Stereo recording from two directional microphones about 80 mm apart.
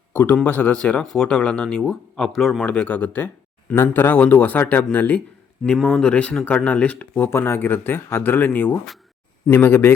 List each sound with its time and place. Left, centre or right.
0.1 s a sound: left
0.4 s speech: left; by 2.6 s centre
2.6 s speech: centre
5.6 s speech: centre
7.3 s speech: left